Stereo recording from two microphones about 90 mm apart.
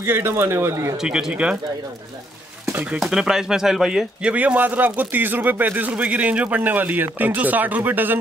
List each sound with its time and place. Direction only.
0.0 s speech: 25° right (ahead or behind)
1.0 s speech: 10° right (ahead or behind)
2.7 s speech: 15° right (ahead or behind)